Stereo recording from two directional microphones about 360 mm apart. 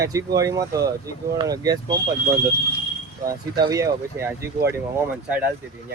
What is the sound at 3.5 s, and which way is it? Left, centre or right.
Speech, centre.